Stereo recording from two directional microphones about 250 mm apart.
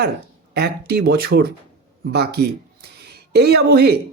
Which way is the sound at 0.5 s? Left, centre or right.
Right.